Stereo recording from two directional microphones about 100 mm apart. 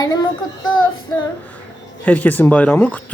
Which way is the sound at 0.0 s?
40° left (ahead or behind).